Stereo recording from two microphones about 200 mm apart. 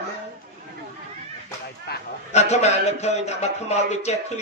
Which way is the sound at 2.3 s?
35° left (ahead or behind).